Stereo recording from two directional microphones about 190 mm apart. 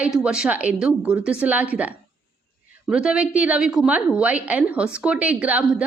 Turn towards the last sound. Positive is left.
turn(degrees=-5)  # may be behind; listen again after turning